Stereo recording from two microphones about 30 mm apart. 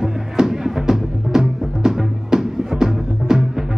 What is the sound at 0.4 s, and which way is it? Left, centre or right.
Music, centre.